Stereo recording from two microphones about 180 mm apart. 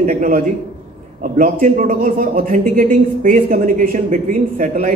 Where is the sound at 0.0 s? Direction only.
50° right (ahead or behind).